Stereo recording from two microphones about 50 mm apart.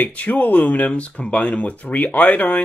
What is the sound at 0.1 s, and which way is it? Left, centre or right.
Speech, left.